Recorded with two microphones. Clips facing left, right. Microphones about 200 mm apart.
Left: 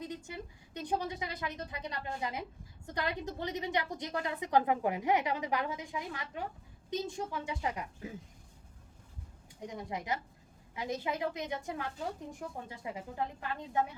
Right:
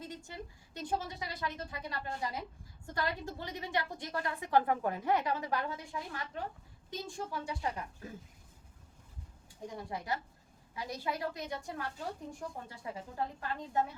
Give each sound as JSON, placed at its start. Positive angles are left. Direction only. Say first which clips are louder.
{"t": 0.0, "sound": "a woman's voice", "louder": "left 3 dB", "side_deg": 20}
{"t": 9.6, "sound": "a woman's voice", "louder": "left 1 dB", "side_deg": 20}